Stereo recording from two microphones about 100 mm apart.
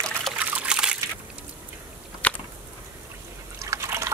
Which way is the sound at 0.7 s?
5° right (ahead or behind).